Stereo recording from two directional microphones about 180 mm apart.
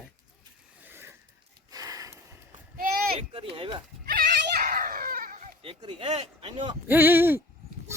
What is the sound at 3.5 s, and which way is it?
Speech, 30° right (ahead or behind).